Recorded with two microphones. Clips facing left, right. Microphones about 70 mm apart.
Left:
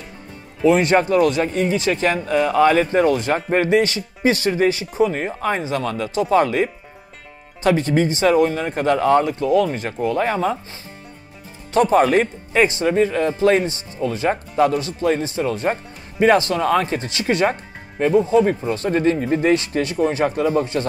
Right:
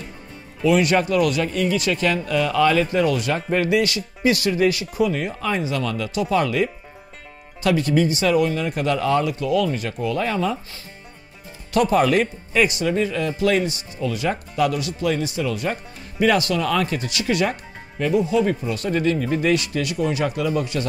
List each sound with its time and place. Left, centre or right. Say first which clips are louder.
0.7 s speech: left 3 dB; left
11.7 s speech: left 3 dB; left